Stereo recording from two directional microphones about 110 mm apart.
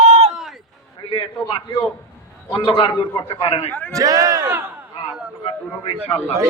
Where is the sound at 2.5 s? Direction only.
50° left (ahead or behind).